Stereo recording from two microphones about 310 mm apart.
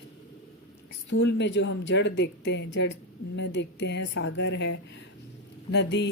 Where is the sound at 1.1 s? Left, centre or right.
Left.